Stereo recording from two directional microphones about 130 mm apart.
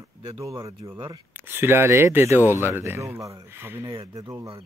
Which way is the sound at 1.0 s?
15° right (ahead or behind).